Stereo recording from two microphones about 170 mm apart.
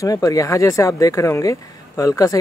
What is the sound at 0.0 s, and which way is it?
Speech, 20° left (ahead or behind).